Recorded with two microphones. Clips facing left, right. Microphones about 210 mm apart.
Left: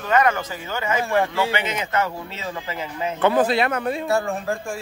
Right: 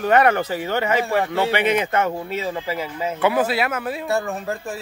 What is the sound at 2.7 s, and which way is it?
A man's voice, 10° right (ahead or behind).